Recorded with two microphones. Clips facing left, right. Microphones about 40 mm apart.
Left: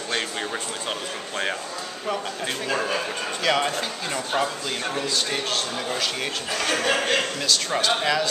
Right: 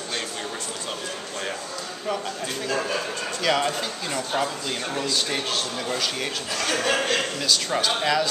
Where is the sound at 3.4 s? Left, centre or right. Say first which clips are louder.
Even; centre.